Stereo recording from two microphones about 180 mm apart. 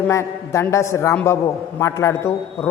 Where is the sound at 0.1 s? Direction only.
15° left (ahead or behind).